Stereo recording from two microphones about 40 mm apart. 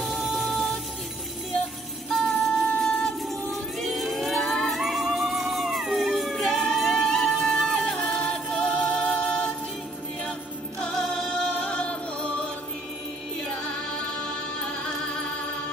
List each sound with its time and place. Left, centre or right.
2.2 s music: centre
3.8 s a sound: centre
5.9 s music: centre
8.0 s music: left
10.9 s music: centre
11.6 s music: left
13.6 s music: left